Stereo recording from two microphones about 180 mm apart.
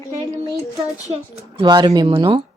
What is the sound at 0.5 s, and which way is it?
Speech, 20° left (ahead or behind).